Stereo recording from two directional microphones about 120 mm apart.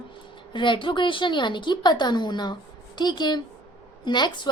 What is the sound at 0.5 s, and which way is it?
A woman's voice, 40° left (ahead or behind).